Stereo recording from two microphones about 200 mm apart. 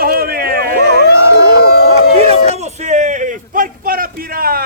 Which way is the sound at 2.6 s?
35° right (ahead or behind).